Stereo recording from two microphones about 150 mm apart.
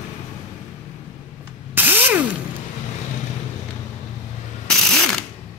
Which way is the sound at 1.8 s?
15° right (ahead or behind).